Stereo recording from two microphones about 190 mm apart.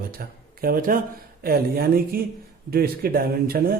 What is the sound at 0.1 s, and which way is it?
Speech, 50° right (ahead or behind).